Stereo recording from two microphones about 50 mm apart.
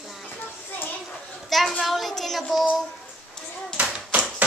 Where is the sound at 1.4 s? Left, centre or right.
Centre.